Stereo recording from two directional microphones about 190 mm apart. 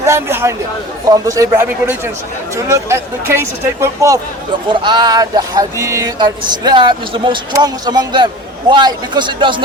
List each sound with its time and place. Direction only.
0.0 s a man's voice: 15° right (ahead or behind)